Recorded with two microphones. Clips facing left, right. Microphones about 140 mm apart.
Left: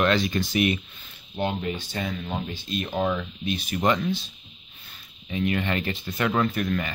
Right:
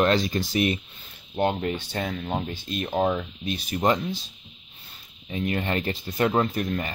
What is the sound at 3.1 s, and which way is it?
Speech, 40° right (ahead or behind).